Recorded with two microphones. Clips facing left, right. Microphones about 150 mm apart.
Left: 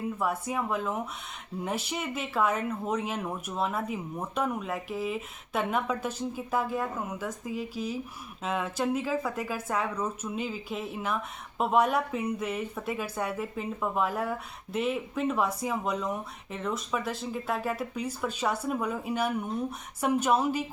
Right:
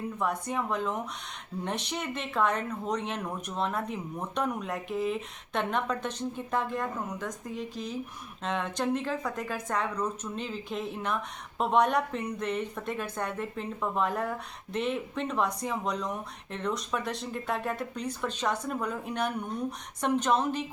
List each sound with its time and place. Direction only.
0.2 s speech: 5° left (ahead or behind)